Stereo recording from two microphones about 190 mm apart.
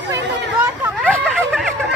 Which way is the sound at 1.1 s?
5° left (ahead or behind).